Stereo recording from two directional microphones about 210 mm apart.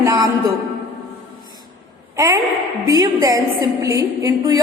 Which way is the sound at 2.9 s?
15° right (ahead or behind).